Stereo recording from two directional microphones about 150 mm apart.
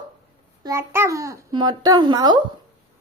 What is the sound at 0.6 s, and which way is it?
A child's voice, 20° right (ahead or behind).